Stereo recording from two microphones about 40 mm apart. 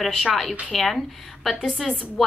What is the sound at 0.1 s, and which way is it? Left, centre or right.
A woman's voice, centre.